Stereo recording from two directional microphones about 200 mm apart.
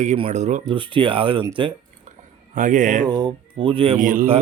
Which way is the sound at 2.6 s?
40° right (ahead or behind).